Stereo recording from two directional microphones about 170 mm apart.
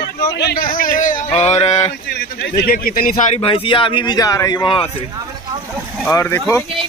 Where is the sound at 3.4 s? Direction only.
35° left (ahead or behind).